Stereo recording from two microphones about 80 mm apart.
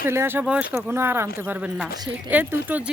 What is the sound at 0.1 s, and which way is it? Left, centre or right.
Speech, right.